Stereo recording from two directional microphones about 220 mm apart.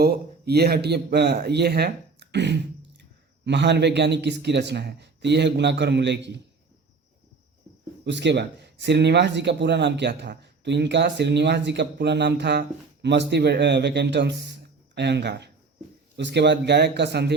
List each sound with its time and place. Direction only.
0.0 s speech: 45° right (ahead or behind)
8.0 s speech: 50° right (ahead or behind)